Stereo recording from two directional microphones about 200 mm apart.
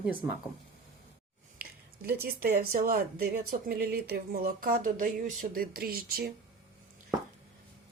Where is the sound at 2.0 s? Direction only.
50° right (ahead or behind).